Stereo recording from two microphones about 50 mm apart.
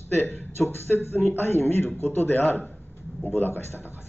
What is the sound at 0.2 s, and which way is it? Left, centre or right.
A man's voice, left.